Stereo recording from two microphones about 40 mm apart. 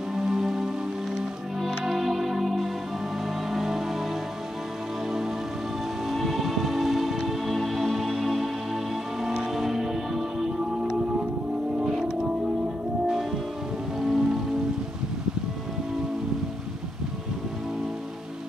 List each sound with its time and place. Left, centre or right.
0.1 s music: centre
1.9 s music: centre
6.0 s music: centre
10.8 s music: right
13.9 s music: centre